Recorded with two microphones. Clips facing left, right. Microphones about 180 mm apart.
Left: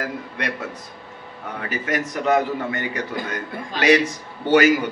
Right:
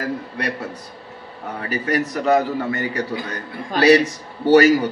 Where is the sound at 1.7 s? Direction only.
35° right (ahead or behind).